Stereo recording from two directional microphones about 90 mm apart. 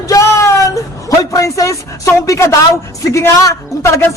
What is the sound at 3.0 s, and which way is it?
Speech, 35° left (ahead or behind).